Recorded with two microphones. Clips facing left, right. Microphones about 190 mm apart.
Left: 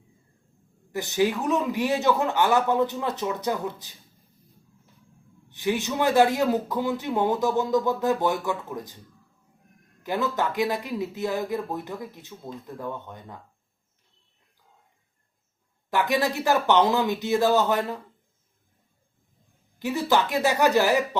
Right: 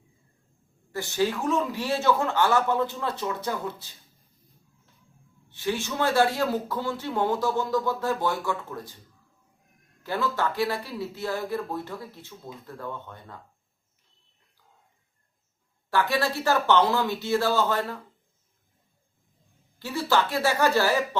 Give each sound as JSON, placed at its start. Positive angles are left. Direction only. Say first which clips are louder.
{"t": 0.9, "sound": "speech", "louder": "left 2 dB", "side_deg": 20}
{"t": 5.5, "sound": "speech", "louder": "left 3 dB", "side_deg": 15}
{"t": 10.0, "sound": "speech", "louder": "left 1 dB", "side_deg": 15}
{"t": 15.9, "sound": "speech", "louder": "left 1 dB", "side_deg": 15}
{"t": 19.8, "sound": "speech", "louder": "left 2 dB", "side_deg": 20}